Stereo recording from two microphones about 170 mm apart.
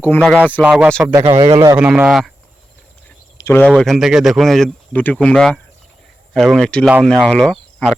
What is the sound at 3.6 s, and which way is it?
Speech, centre (ahead or behind).